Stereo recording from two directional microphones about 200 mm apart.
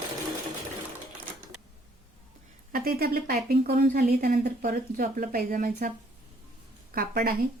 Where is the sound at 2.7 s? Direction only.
50° right (ahead or behind).